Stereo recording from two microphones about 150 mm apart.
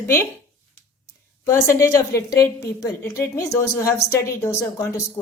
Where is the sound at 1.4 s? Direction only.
20° left (ahead or behind).